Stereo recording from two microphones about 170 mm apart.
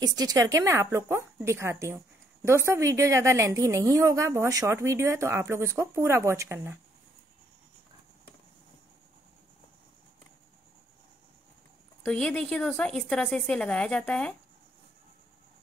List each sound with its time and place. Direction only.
0.0 s a woman's voice: 20° right (ahead or behind)
12.0 s a woman's voice: 5° left (ahead or behind)